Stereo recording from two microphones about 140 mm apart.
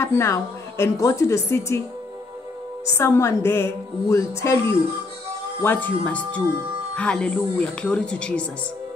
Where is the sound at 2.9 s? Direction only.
20° left (ahead or behind).